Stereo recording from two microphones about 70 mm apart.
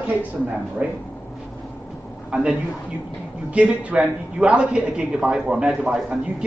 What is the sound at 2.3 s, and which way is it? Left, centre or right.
A man's voice, centre.